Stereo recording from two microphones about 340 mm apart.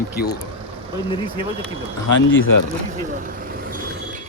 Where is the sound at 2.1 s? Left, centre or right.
Left.